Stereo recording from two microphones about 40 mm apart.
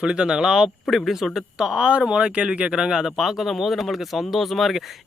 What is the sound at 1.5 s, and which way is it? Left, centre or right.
Speech, centre.